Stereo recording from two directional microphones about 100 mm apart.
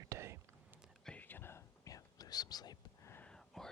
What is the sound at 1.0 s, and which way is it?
Whispering, 15° left (ahead or behind).